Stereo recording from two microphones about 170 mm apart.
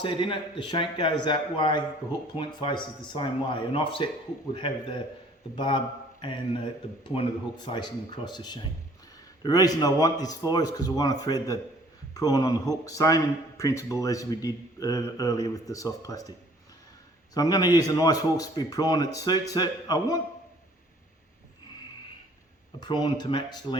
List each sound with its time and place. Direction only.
0.0 s a man's voice: 30° left (ahead or behind)
7.1 s a man's voice: 30° left (ahead or behind)
17.3 s a man's voice: 20° left (ahead or behind)
22.8 s a man's voice: 25° left (ahead or behind)